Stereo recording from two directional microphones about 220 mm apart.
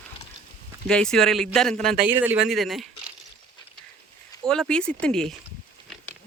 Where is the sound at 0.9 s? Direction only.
5° left (ahead or behind).